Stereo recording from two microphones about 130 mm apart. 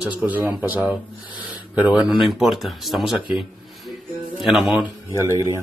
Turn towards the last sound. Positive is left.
turn(degrees=-25)  # may be behind; listen again after turning